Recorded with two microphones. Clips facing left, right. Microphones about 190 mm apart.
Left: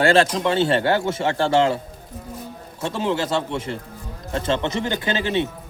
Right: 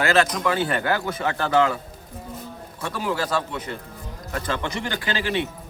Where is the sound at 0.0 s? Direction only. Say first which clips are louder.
Left 3 dB; 30° left (ahead or behind).